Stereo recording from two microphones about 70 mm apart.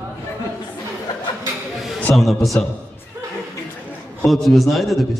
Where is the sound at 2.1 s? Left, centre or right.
Centre.